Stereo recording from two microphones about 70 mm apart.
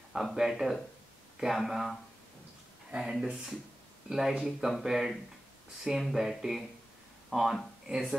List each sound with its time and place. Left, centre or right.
0.1 s speech: centre